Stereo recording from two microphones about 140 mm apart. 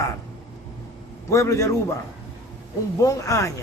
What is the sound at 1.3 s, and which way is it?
Speech, 20° left (ahead or behind).